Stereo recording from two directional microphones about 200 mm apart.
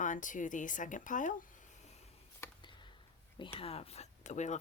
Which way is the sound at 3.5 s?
30° left (ahead or behind).